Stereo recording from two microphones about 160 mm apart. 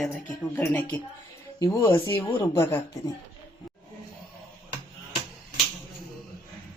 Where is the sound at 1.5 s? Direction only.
25° left (ahead or behind).